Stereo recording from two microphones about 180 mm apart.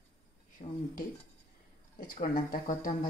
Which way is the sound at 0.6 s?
45° left (ahead or behind).